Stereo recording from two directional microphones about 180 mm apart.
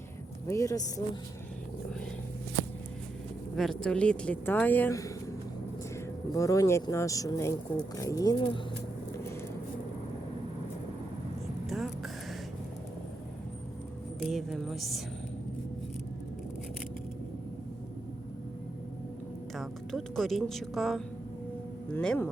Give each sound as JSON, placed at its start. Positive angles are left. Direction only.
{"t": 0.4, "sound": "speech", "side_deg": 15}
{"t": 3.5, "sound": "speech", "side_deg": 0}
{"t": 6.3, "sound": "speech", "side_deg": 20}
{"t": 11.6, "sound": "a sound", "side_deg": 0}
{"t": 14.2, "sound": "speech", "side_deg": 0}
{"t": 19.5, "sound": "speech", "side_deg": 0}